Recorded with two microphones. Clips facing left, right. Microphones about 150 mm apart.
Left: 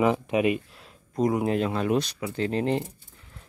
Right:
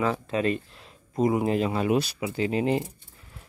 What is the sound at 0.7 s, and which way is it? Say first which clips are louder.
Speech: right 1 dB; centre (ahead or behind).